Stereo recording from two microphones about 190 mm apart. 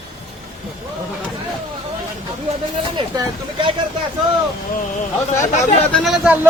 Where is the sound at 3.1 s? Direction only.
25° right (ahead or behind).